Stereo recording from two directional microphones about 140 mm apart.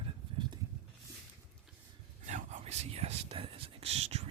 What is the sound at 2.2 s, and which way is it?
Whispering, 55° right (ahead or behind).